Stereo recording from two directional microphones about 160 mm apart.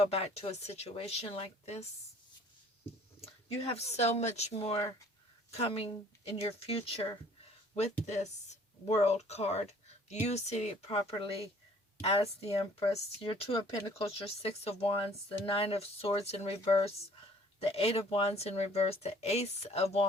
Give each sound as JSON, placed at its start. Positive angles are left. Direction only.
{"t": 0.0, "sound": "speech", "side_deg": 40}
{"t": 3.7, "sound": "speech", "side_deg": 40}
{"t": 8.0, "sound": "speech", "side_deg": 45}
{"t": 17.6, "sound": "speech", "side_deg": 35}